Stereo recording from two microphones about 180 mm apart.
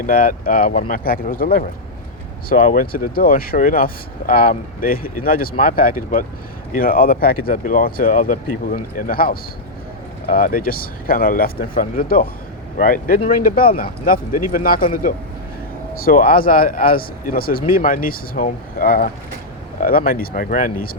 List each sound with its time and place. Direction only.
0.0 s speech: 50° left (ahead or behind)
16.0 s speech: 55° left (ahead or behind)